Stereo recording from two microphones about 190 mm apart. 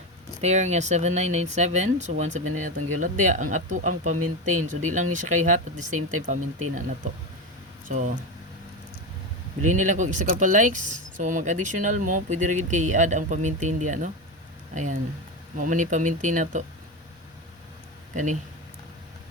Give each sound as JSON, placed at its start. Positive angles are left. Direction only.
{"t": 0.4, "sound": "speech", "side_deg": -35}
{"t": 7.9, "sound": "speech", "side_deg": -40}
{"t": 9.6, "sound": "speech", "side_deg": -40}
{"t": 15.5, "sound": "speech", "side_deg": -40}